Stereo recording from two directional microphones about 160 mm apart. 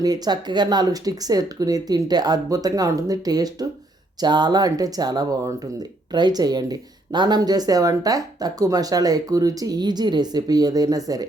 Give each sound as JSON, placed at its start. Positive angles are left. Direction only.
{"t": 0.0, "sound": "speech", "side_deg": -25}